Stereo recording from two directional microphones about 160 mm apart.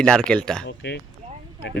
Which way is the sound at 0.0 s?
5° left (ahead or behind).